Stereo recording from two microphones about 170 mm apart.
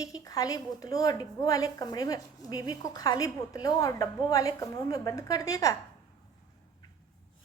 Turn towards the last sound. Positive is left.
turn(degrees=20)  # may be behind; listen again after turning